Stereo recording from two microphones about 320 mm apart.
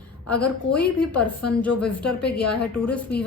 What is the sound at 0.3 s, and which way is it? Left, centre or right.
A woman's voice, centre.